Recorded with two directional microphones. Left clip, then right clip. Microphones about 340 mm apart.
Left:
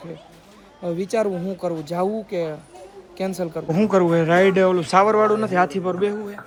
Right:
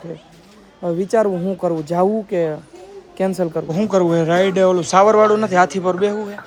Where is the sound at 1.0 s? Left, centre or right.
Right.